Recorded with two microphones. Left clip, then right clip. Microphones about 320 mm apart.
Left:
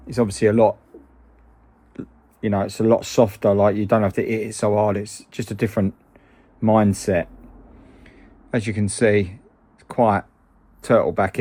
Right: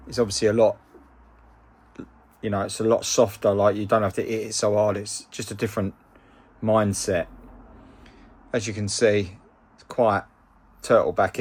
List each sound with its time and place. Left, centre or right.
0.1 s speech: left
1.9 s speech: centre
7.9 s a sound: centre
9.9 s speech: left